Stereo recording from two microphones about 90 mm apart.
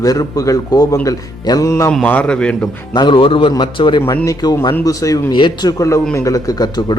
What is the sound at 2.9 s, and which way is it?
Speech, 55° left (ahead or behind).